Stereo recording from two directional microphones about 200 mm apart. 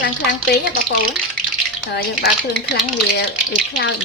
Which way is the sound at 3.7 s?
60° left (ahead or behind).